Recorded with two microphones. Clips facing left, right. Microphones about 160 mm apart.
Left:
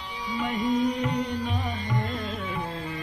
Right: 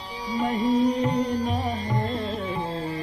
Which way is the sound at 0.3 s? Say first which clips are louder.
Right 3 dB; 35° right (ahead or behind).